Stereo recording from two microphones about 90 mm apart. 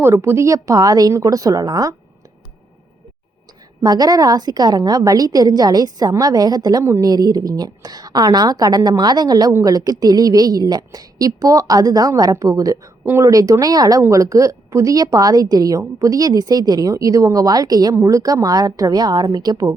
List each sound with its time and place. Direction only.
0.0 s a woman's voice: 30° right (ahead or behind)
3.8 s a woman's voice: 45° right (ahead or behind)